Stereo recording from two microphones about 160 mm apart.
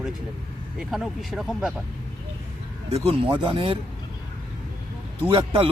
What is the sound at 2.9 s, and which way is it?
Speech, 35° right (ahead or behind).